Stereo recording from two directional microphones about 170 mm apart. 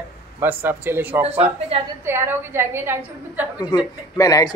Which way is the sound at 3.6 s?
20° left (ahead or behind).